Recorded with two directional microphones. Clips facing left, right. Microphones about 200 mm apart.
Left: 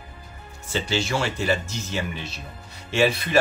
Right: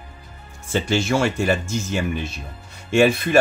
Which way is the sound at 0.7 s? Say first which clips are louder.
Right 5 dB; 50° right (ahead or behind).